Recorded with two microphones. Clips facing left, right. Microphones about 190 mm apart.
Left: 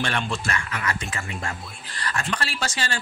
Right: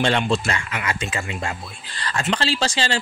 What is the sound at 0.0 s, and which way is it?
Speech, 25° right (ahead or behind).